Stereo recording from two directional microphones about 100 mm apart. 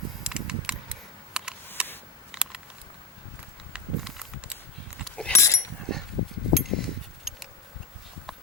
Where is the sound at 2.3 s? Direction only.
10° right (ahead or behind).